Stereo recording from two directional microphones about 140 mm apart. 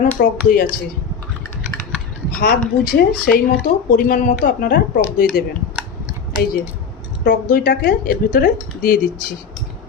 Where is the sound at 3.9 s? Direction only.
80° left.